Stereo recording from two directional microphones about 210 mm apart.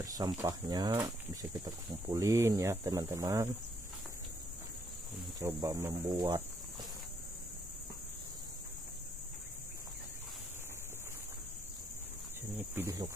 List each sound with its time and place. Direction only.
0.4 s speech: 20° right (ahead or behind)
5.4 s speech: 15° right (ahead or behind)
12.5 s speech: 10° right (ahead or behind)